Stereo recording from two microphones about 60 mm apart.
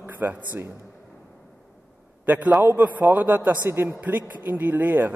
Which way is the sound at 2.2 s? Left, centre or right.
Right.